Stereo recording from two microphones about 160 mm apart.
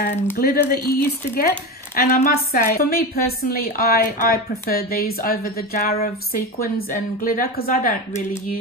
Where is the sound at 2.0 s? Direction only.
65° left (ahead or behind).